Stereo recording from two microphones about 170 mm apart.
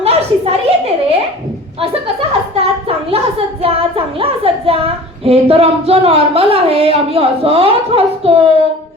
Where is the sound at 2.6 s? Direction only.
35° right (ahead or behind).